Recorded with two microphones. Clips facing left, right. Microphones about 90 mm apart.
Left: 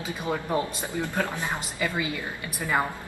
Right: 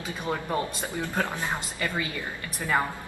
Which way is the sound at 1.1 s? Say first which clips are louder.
Right 2 dB; 15° right (ahead or behind).